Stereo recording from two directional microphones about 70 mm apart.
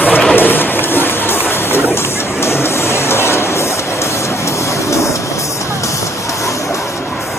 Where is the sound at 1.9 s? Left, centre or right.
Left.